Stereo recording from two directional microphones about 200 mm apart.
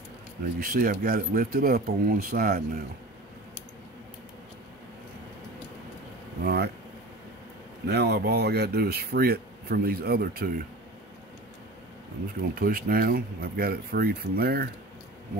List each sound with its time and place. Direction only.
0.4 s speech: 45° right (ahead or behind)
6.4 s speech: 55° right (ahead or behind)
7.9 s speech: 55° right (ahead or behind)
12.5 s speech: 45° right (ahead or behind)